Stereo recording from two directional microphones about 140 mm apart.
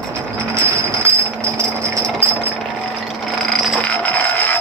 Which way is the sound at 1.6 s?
20° right (ahead or behind).